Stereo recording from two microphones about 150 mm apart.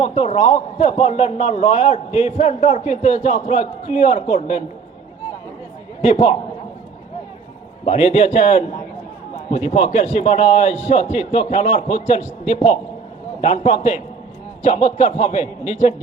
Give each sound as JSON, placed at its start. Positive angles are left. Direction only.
{"t": 0.0, "sound": "a man's voice", "side_deg": 40}
{"t": 6.0, "sound": "a man's voice", "side_deg": 45}
{"t": 7.9, "sound": "a man's voice", "side_deg": 45}